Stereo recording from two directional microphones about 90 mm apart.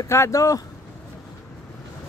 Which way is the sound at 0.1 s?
35° left (ahead or behind).